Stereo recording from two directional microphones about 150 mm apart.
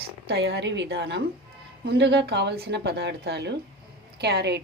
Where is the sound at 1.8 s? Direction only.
90° right.